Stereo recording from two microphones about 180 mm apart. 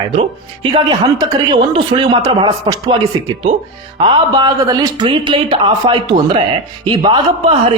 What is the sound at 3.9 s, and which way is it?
A man's voice, 25° right (ahead or behind).